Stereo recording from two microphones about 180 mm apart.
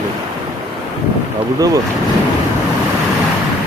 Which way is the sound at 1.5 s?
20° right (ahead or behind).